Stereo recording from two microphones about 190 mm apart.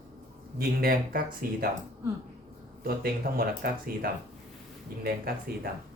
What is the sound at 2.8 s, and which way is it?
Speech, 50° right (ahead or behind).